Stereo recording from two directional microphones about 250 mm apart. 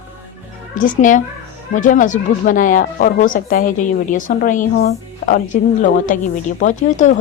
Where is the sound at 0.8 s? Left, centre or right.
Left.